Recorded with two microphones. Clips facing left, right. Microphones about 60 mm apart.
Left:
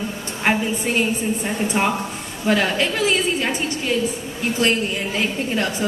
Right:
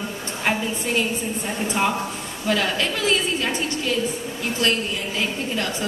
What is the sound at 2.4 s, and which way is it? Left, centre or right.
Speech, left.